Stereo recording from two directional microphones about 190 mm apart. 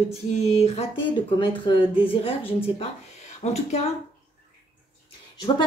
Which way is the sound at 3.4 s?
35° left (ahead or behind).